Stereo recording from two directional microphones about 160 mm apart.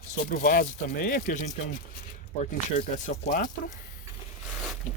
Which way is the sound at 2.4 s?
50° left (ahead or behind).